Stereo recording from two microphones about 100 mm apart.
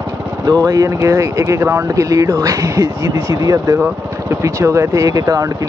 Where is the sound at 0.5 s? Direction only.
40° right (ahead or behind).